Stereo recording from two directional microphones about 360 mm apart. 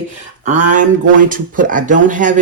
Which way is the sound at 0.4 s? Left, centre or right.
Right.